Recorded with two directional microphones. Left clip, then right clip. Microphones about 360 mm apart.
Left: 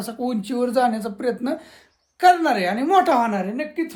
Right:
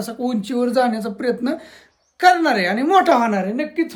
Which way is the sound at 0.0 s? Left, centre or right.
Centre.